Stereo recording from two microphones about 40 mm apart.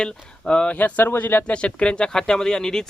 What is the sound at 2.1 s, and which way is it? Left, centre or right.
Speech, centre.